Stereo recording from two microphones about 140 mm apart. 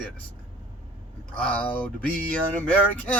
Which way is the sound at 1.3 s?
10° left (ahead or behind).